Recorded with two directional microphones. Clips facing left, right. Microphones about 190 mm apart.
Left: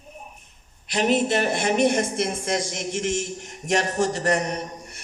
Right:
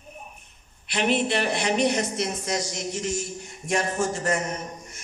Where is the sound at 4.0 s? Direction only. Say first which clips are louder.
Left 3 dB; 70° left (ahead or behind).